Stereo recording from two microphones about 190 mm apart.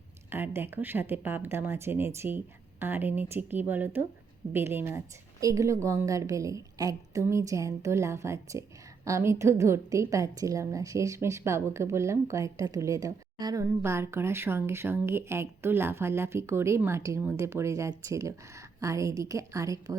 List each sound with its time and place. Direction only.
0.3 s a woman's voice: 10° right (ahead or behind)